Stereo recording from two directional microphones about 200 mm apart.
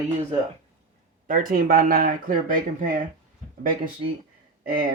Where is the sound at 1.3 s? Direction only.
45° right (ahead or behind).